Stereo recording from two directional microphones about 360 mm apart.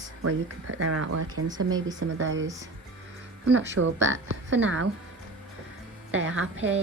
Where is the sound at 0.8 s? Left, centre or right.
Right.